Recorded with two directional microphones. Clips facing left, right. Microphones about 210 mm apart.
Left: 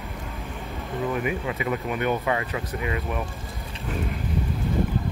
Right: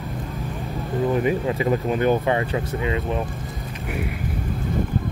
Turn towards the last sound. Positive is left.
turn(degrees=-25)  # may be behind; listen again after turning